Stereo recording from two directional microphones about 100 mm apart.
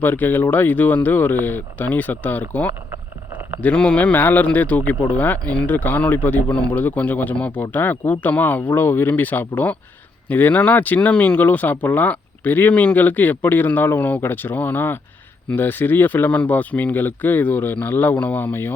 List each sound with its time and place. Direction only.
0.0 s speech: 20° left (ahead or behind)